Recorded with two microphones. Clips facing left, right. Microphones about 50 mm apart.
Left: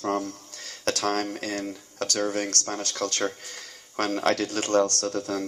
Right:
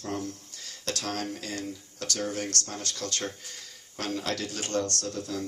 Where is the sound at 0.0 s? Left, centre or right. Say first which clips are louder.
Left 7 dB; left.